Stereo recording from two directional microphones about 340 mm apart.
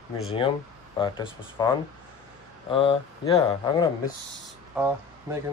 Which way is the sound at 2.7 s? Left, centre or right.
Centre.